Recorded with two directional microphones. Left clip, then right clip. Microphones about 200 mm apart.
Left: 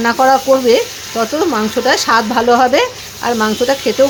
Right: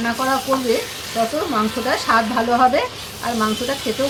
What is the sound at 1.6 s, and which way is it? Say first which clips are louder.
Speech: left 5 dB; 55° left (ahead or behind).